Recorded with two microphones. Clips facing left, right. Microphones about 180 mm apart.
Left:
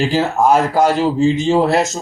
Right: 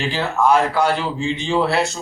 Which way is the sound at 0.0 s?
40° left (ahead or behind).